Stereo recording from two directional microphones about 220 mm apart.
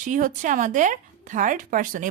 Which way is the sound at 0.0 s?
35° right (ahead or behind).